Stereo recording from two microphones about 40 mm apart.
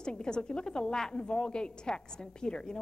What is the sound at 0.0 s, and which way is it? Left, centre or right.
A woman's voice, left.